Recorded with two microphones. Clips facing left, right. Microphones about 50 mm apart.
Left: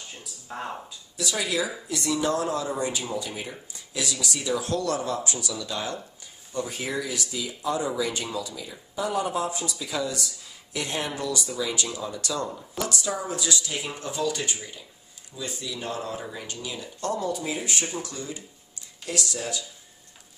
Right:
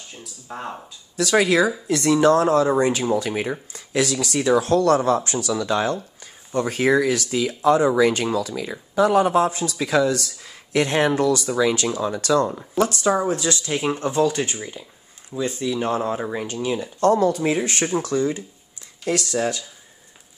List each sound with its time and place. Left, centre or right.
0.5 s speech: centre
1.1 s speech: right
6.5 s speech: right
17.1 s speech: right